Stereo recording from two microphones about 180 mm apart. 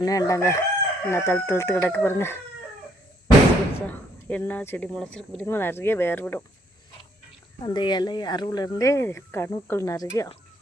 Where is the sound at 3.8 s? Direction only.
10° left (ahead or behind).